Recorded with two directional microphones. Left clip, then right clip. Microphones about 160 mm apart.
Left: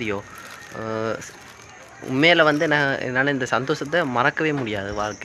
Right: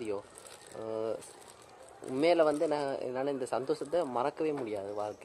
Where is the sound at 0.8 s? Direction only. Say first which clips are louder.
Left 9 dB; 20° left (ahead or behind).